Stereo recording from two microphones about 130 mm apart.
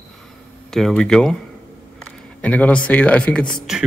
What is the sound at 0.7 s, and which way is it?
Speech, 5° left (ahead or behind).